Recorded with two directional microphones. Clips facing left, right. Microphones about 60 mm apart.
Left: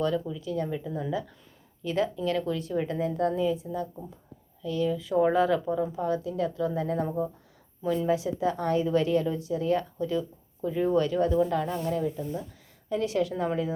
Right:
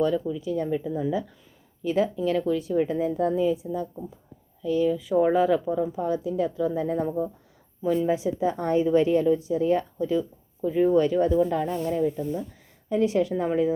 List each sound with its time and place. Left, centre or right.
0.0 s a woman's voice: centre